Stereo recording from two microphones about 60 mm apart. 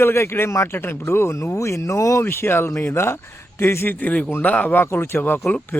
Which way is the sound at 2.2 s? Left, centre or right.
Left.